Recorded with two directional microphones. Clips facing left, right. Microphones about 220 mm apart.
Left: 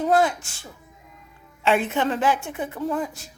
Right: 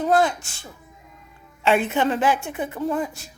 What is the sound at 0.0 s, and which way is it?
A woman's voice, 5° left (ahead or behind).